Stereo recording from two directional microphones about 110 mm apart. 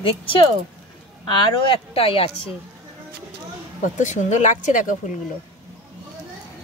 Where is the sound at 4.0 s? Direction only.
90° left.